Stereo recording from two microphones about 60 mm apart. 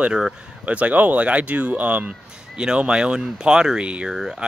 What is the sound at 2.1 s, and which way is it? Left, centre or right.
Speech, centre.